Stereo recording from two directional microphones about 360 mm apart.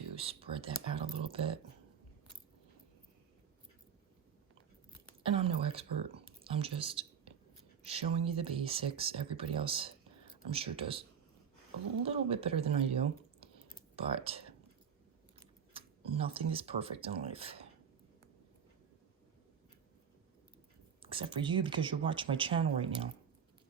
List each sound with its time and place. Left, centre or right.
0.2 s speech: centre
5.2 s speech: centre
6.2 s whispering: centre
7.9 s speech: centre
12.0 s speech: centre
15.7 s speech: centre
21.0 s speech: centre